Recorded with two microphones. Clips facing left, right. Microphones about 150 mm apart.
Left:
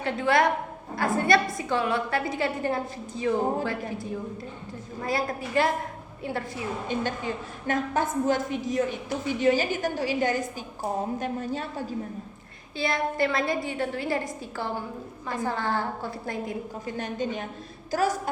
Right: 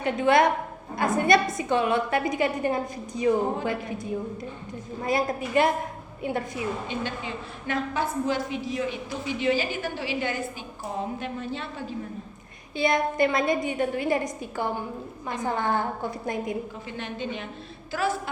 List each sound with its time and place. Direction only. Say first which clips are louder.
0.0 s a woman's voice: right 2 dB; 20° right (ahead or behind)
5.0 s a woman's voice: right 3 dB; 20° right (ahead or behind)
6.8 s a woman's voice: left 3 dB; 45° left (ahead or behind)
12.7 s a woman's voice: right 3 dB; 20° right (ahead or behind)
16.8 s a woman's voice: left 3 dB; 45° left (ahead or behind)